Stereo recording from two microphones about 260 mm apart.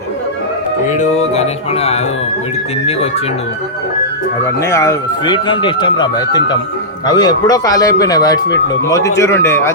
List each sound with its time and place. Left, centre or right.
0.9 s music: left
4.7 s speech: centre